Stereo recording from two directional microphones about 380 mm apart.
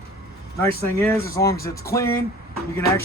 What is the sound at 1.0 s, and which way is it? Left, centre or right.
Speech, centre.